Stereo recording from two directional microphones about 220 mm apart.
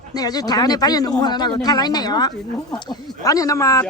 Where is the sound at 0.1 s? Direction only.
15° left (ahead or behind).